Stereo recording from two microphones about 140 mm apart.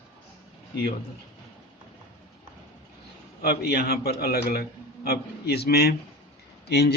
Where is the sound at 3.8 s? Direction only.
90° left.